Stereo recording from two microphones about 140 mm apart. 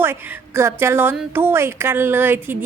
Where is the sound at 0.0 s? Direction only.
15° right (ahead or behind).